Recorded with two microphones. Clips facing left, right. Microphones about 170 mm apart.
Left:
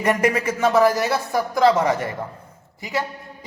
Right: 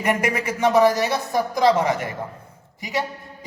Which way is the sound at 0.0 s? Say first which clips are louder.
Left 3 dB; 15° right (ahead or behind).